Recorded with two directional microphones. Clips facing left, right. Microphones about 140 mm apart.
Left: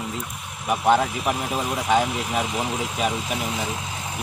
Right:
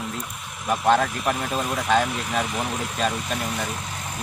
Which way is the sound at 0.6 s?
10° left (ahead or behind).